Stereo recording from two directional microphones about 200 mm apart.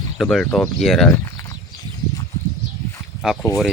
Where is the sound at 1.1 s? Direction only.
15° left (ahead or behind).